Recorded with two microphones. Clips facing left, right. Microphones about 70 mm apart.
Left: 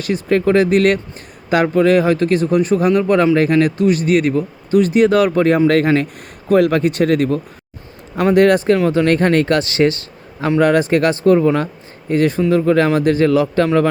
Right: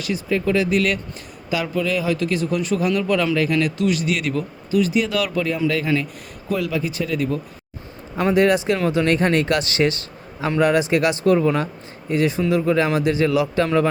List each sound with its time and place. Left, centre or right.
0.0 s a man's voice: left
10.6 s a man's voice: left
12.1 s a man's voice: left